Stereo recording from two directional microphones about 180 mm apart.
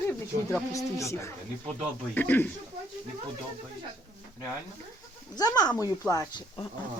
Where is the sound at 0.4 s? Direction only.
15° left (ahead or behind).